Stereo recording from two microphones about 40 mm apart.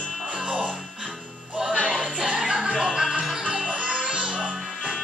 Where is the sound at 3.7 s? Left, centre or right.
Right.